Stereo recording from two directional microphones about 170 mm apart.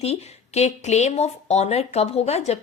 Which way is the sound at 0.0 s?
40° left (ahead or behind).